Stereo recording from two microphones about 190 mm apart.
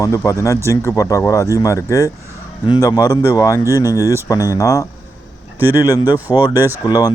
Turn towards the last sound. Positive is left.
turn(degrees=20)  # may be behind; listen again after turning